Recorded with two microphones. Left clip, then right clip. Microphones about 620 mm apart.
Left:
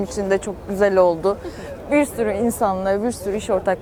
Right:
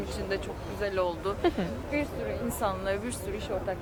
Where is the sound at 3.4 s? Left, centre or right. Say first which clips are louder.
Left 13 dB; left.